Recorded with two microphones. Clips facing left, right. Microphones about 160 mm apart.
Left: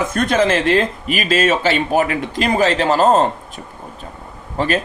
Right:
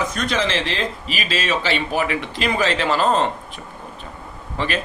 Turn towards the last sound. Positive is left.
turn(degrees=40)  # may be behind; listen again after turning